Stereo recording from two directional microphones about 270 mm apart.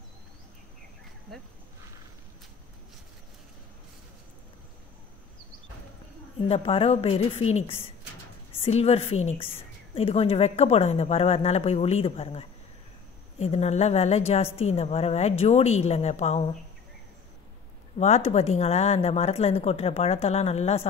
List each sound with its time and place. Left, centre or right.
6.5 s a woman's voice: left
17.9 s a woman's voice: left